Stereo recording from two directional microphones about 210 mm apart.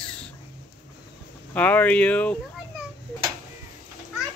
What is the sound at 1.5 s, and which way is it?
Speech, 10° left (ahead or behind).